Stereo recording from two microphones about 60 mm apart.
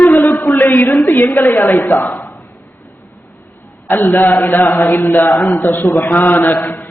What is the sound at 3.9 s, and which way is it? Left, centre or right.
A man's voice, left.